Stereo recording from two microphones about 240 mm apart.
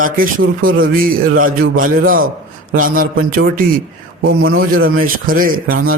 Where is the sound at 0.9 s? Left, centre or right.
Right.